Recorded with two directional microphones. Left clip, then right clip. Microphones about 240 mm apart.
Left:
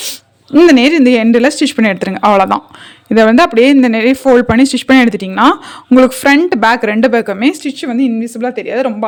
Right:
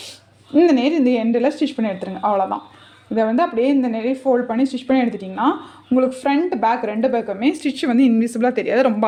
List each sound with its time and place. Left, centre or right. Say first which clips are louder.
0.5 s speech: left 9 dB; left
7.5 s speech: left 2 dB; centre